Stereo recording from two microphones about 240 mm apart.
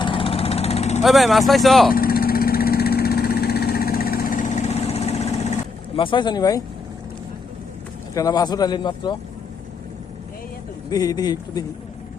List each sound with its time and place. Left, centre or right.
0.0 s vehicle: left
1.0 s speech: centre
1.9 s vehicle: left
6.0 s speech: centre
8.1 s speech: centre
10.8 s speech: centre